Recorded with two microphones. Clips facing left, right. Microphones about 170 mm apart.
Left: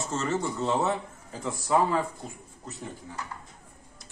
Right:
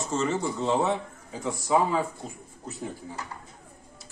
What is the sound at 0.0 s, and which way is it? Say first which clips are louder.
Speech: right 2 dB; centre (ahead or behind).